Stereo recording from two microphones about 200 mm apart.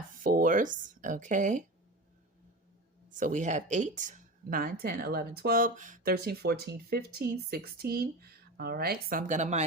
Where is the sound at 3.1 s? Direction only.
40° right (ahead or behind).